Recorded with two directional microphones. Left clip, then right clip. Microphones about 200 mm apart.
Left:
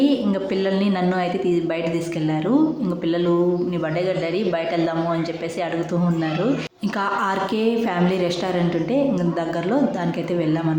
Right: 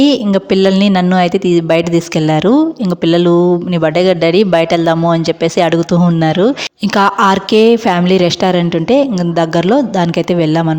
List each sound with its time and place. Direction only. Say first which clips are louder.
0.0 s speech: right 9 dB; 55° right (ahead or behind)